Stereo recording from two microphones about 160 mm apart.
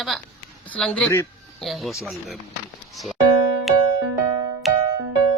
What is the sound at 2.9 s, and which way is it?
Music, centre (ahead or behind).